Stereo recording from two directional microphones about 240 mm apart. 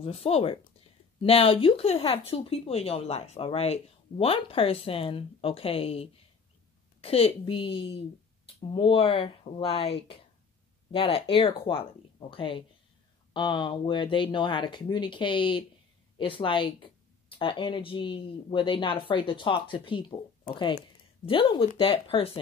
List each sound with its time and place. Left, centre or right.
0.0 s speech: left